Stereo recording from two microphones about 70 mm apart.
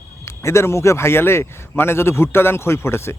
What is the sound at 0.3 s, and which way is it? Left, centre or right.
Speech, left.